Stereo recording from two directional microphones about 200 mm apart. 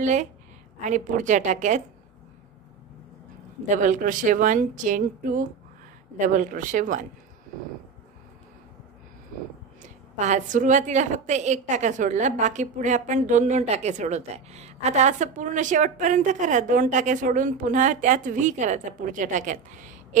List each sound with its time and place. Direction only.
0.0 s a woman's voice: 35° right (ahead or behind)
3.6 s a woman's voice: 40° right (ahead or behind)
10.1 s a woman's voice: 35° right (ahead or behind)